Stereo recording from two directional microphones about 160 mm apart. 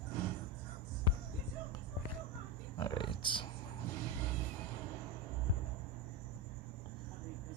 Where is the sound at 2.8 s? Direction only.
25° left (ahead or behind).